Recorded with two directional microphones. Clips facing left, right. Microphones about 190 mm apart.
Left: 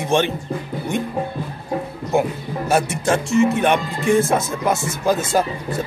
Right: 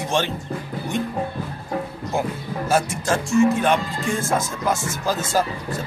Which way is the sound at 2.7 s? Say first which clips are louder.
Left 3 dB; 65° left (ahead or behind).